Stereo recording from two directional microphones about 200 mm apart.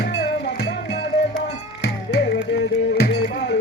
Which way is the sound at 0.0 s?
55° left (ahead or behind).